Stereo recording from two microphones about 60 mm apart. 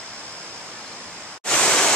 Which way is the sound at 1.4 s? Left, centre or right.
Centre.